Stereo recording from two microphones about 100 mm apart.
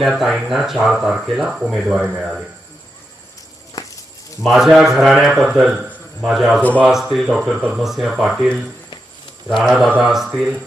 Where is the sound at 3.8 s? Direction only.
35° left (ahead or behind).